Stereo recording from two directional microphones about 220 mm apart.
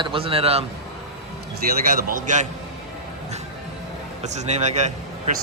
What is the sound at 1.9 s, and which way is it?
Speech, 40° right (ahead or behind).